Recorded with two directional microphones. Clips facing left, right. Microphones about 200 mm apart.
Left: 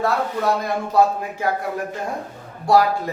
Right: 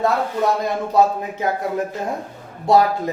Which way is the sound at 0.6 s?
20° right (ahead or behind).